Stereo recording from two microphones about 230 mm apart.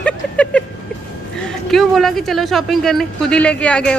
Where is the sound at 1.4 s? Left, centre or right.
Centre.